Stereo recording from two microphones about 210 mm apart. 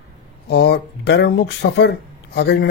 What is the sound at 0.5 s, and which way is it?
A man's voice, 50° left (ahead or behind).